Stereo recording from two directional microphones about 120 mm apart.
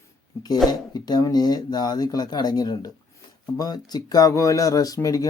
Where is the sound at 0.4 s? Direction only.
35° left (ahead or behind).